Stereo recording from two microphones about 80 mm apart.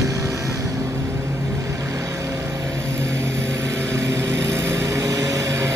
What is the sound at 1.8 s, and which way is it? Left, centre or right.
Vehicle, right.